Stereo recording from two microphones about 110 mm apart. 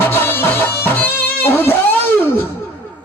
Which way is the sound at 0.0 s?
20° left (ahead or behind).